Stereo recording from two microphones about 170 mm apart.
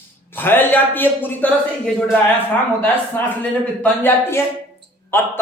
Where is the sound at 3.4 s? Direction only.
10° left (ahead or behind).